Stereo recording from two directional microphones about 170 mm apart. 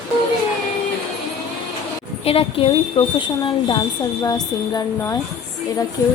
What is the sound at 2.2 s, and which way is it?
A woman's voice, 35° left (ahead or behind).